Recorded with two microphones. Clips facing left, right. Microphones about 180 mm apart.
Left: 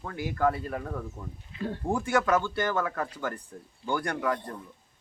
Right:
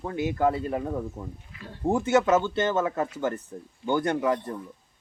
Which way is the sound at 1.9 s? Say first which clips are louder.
Right 5 dB; 20° right (ahead or behind).